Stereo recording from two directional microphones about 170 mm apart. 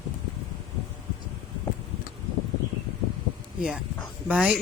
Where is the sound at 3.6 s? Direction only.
5° right (ahead or behind).